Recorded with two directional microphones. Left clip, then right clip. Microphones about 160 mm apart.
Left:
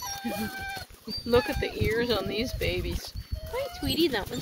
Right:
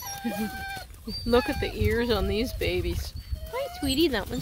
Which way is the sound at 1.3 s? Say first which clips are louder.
Right 1 dB; 40° right (ahead or behind).